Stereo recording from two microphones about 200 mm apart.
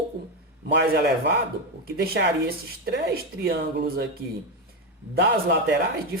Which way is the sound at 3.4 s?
50° right (ahead or behind).